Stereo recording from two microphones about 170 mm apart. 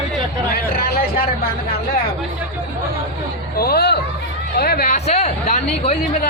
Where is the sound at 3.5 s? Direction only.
65° left (ahead or behind).